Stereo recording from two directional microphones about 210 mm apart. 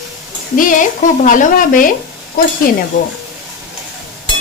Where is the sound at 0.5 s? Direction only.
40° left (ahead or behind).